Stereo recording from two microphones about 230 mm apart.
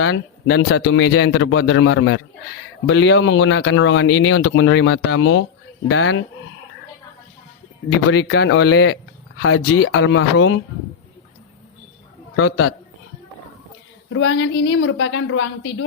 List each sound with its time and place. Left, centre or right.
0.0 s speech: left
8.1 s speech: left
8.7 s a man's voice: left
12.4 s a man's voice: left
14.1 s a woman's voice: left